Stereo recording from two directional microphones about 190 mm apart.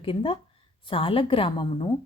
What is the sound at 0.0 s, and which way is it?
Speech, 30° left (ahead or behind).